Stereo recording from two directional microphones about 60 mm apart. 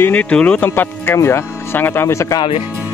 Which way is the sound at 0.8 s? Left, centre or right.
Left.